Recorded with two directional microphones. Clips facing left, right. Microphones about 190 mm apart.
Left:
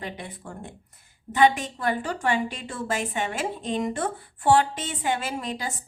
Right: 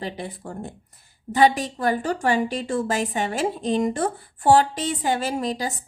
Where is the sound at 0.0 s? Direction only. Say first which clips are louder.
Right 5 dB; 35° right (ahead or behind).